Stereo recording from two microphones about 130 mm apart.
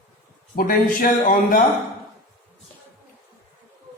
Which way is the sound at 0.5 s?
90° left.